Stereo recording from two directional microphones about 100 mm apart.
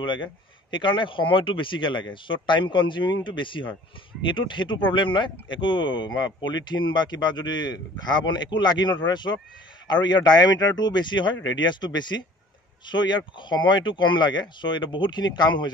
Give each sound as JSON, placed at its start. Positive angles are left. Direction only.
{"t": 0.0, "sound": "speech", "side_deg": 50}